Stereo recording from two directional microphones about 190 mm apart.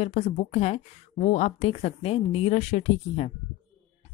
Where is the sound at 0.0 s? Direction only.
35° left (ahead or behind).